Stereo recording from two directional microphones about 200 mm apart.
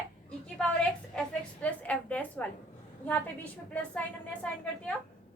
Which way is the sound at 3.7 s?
5° left (ahead or behind).